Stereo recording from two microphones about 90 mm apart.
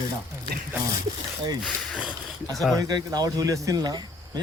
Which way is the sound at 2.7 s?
45° right (ahead or behind).